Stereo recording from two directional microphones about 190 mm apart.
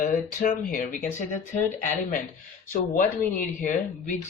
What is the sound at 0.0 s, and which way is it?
Speech, 45° left (ahead or behind).